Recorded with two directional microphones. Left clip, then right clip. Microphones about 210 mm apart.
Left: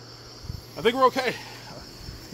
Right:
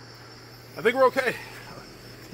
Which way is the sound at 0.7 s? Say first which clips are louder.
Even; 50° left (ahead or behind).